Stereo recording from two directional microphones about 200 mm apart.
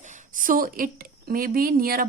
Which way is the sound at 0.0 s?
40° right (ahead or behind).